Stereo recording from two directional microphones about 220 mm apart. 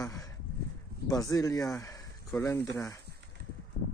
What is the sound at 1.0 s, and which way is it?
Speech, 15° left (ahead or behind).